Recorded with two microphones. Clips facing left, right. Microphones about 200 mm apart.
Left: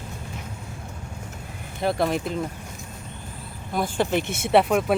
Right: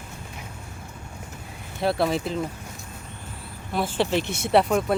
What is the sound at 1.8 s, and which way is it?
Speech, 5° right (ahead or behind).